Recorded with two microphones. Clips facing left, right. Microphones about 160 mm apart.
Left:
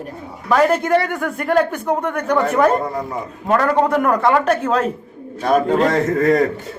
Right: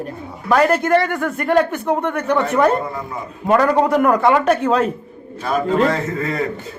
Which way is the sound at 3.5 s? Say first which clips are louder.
Right 1 dB; 5° right (ahead or behind).